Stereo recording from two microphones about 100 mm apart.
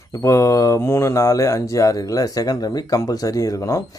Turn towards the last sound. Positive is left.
turn(degrees=30)  # may be behind; listen again after turning